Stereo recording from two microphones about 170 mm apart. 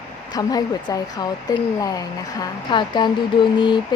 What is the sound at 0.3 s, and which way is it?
Speech, 25° left (ahead or behind).